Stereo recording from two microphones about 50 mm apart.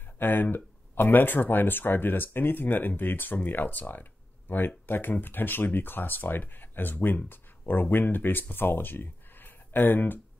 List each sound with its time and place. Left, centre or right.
0.2 s speech: left
7.2 s a sound: left
7.9 s speech: left